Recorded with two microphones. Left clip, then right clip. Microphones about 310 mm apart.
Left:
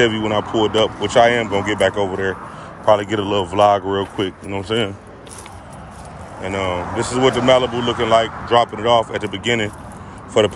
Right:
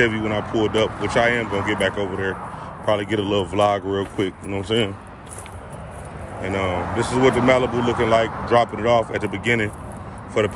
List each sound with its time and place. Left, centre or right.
0.0 s speech: centre
6.4 s speech: centre
7.7 s speech: centre
8.0 s speech: centre